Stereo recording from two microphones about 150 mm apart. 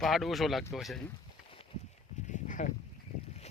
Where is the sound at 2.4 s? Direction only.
60° left (ahead or behind).